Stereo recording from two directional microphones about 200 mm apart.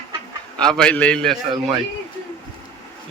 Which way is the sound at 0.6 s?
5° left (ahead or behind).